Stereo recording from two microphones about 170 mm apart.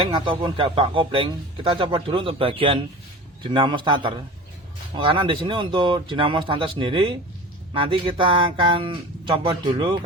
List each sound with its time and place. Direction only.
0.1 s speech: 30° right (ahead or behind)